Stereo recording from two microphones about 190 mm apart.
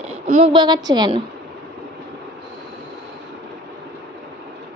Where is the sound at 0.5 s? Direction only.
20° right (ahead or behind).